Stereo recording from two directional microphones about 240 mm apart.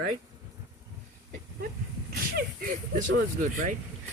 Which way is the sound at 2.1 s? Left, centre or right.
Right.